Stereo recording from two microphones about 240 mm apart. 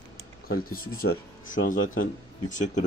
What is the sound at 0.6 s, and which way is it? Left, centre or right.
Speech, left.